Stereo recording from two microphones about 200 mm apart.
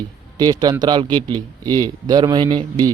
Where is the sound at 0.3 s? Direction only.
20° right (ahead or behind).